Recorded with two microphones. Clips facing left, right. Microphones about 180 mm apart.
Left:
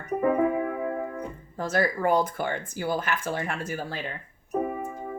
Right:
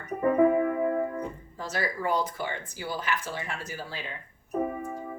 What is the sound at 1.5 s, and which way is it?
Speech, 50° left (ahead or behind).